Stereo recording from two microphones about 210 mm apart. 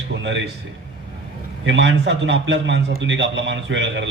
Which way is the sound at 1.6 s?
60° right (ahead or behind).